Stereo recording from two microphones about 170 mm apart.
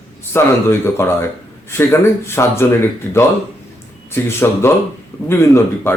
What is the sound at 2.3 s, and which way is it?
Speech, 15° left (ahead or behind).